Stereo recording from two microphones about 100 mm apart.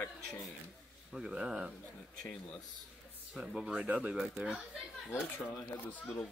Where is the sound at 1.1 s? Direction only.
5° right (ahead or behind).